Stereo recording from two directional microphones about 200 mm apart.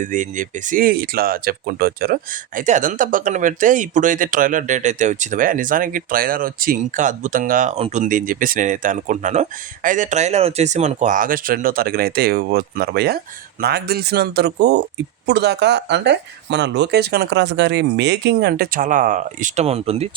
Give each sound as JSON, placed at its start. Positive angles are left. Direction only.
{"t": 0.0, "sound": "speech", "side_deg": -40}